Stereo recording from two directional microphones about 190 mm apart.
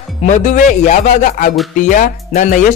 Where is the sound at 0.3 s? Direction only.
40° left (ahead or behind).